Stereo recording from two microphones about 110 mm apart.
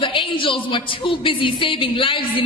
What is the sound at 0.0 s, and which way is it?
A woman's voice, 50° left (ahead or behind).